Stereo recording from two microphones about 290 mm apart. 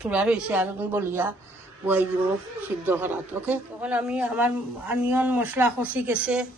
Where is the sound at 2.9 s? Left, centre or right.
Centre.